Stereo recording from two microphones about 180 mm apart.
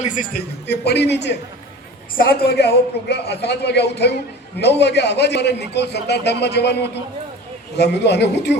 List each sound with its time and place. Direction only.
0.0 s a man's voice: 45° left (ahead or behind)
0.7 s a man's voice: 70° left (ahead or behind)
2.1 s a man's voice: 60° left (ahead or behind)